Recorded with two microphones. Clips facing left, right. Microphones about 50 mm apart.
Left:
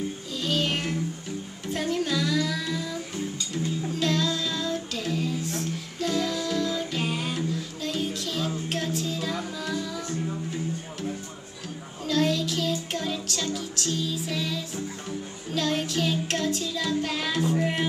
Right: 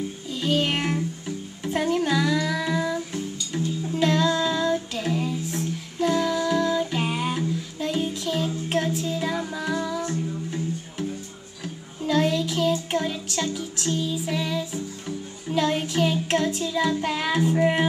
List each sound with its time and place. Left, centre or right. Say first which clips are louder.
0.3 s music: right 4 dB; centre
1.6 s child singing: right 4 dB; centre
8.6 s music: right 4 dB; centre
12.0 s child singing: right 2 dB; centre